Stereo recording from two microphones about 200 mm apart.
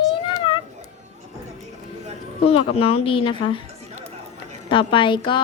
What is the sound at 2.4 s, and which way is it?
A woman's voice, 30° left (ahead or behind).